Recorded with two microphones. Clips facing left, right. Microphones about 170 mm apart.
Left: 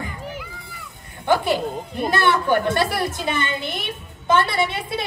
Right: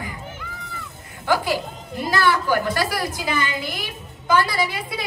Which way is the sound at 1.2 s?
20° left (ahead or behind).